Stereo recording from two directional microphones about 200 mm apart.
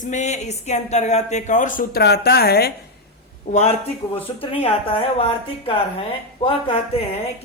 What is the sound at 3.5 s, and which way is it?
Speech, 35° left (ahead or behind).